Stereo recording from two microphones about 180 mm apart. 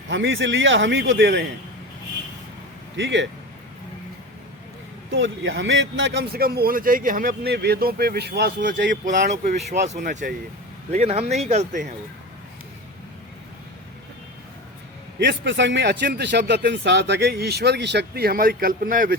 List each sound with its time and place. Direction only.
0.1 s speech: 90° right
2.9 s speech: 90° right
5.1 s a man's voice: 90° right; by 10.3 s 45° right (ahead or behind)
10.9 s speech: 35° right (ahead or behind)
15.2 s speech: 80° right; by 19.1 s 50° right (ahead or behind)